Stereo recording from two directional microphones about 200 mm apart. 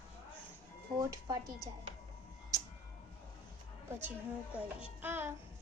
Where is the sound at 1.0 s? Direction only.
20° right (ahead or behind).